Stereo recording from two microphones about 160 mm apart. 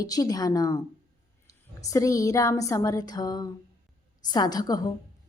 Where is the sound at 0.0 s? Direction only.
25° left (ahead or behind).